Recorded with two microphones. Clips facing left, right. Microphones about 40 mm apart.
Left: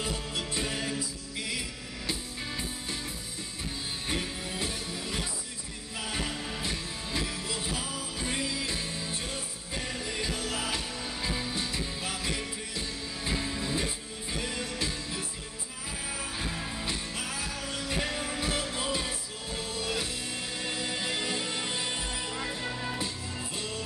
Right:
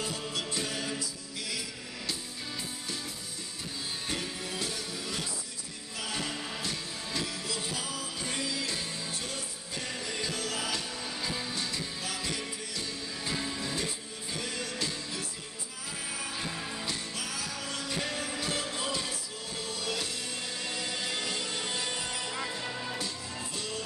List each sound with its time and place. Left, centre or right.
0.0 s music: left
4.1 s music: centre
6.3 s music: centre
6.6 s music: centre
16.8 s music: left
22.9 s music: left